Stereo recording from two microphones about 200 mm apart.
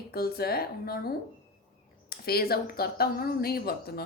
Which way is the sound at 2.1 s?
50° left (ahead or behind).